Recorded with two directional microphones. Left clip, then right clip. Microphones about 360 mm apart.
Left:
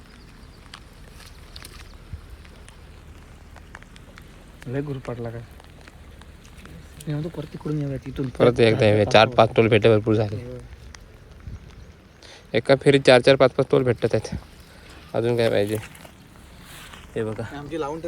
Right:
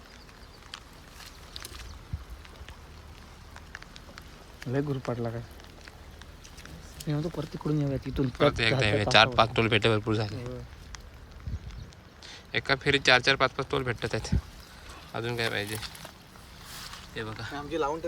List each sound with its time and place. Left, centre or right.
4.7 s speech: right
7.2 s speech: right
8.3 s a man's voice: centre
12.2 s a sound: centre
12.9 s a man's voice: centre
17.2 s a man's voice: centre